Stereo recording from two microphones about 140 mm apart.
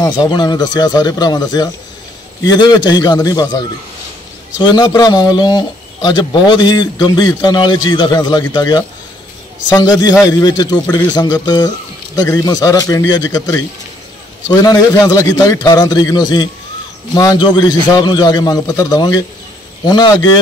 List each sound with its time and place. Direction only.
0.0 s a man's voice: 30° left (ahead or behind)
9.9 s a man's voice: 25° left (ahead or behind)